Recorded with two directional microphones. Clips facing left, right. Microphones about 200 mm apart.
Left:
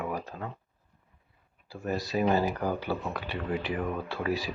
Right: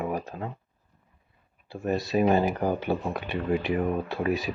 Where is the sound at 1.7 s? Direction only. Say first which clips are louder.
Right 4 dB; 25° right (ahead or behind).